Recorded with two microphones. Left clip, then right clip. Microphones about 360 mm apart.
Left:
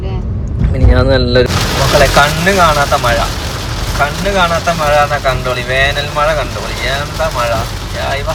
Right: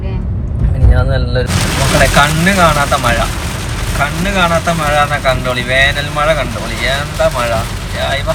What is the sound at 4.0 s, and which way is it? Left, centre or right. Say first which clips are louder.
Speech: left 2 dB; centre.